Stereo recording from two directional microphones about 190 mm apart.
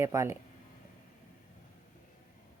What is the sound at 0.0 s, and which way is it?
Speech, 15° right (ahead or behind).